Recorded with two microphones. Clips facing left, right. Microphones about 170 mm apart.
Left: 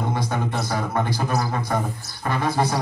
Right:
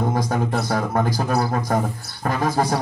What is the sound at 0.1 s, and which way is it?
Speech, 40° right (ahead or behind).